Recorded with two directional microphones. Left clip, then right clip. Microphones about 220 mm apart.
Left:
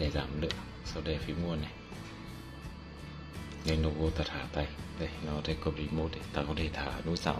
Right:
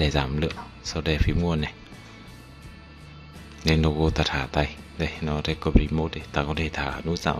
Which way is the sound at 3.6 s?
35° right (ahead or behind).